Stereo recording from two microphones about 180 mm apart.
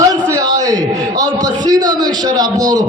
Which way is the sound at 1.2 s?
20° right (ahead or behind).